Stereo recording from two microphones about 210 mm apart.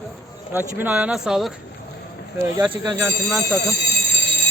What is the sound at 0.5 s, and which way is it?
Speech, 10° right (ahead or behind).